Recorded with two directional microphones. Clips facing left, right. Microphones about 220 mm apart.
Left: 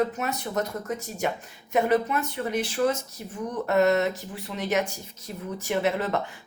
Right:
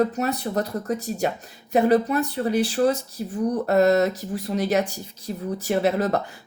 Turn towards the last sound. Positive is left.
turn(degrees=-40)  # may be behind; listen again after turning